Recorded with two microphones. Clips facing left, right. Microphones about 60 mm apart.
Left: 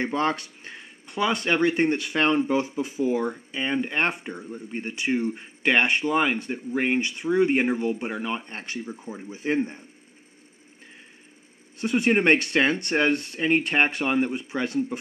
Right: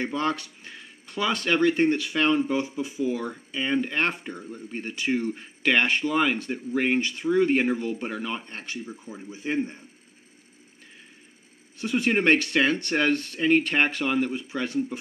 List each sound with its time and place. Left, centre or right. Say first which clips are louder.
0.0 s speech: left 2 dB; left
1.0 s speech: left 2 dB; centre
8.5 s speech: left 2 dB; left
11.8 s speech: left 2 dB; left